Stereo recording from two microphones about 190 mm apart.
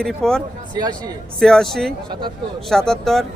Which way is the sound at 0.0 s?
5° left (ahead or behind).